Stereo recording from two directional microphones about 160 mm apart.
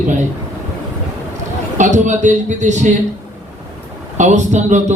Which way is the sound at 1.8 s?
50° right (ahead or behind).